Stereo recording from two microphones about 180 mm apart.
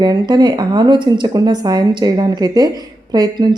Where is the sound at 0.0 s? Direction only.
25° right (ahead or behind).